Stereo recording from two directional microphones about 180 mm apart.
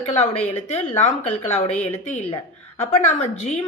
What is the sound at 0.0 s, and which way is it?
Speech, 35° left (ahead or behind).